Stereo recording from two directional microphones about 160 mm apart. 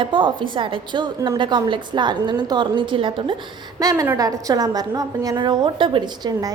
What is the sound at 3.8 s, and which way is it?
A woman's voice, 20° right (ahead or behind).